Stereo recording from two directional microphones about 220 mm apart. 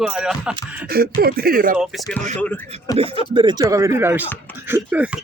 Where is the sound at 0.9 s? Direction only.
45° right (ahead or behind).